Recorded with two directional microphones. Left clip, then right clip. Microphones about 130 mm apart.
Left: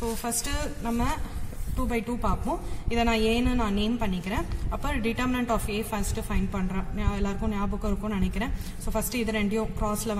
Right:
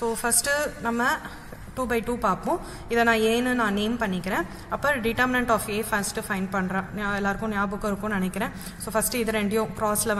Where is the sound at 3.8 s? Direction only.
Centre (ahead or behind).